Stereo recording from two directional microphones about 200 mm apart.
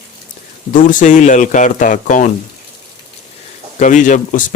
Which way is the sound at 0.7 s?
40° left (ahead or behind).